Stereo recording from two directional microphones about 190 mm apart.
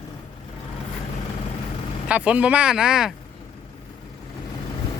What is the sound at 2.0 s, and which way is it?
Speech, 5° right (ahead or behind).